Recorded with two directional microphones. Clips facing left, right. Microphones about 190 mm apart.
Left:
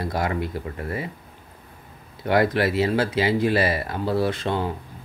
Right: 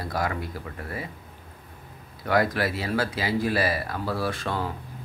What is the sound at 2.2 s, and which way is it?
Speech, 25° left (ahead or behind).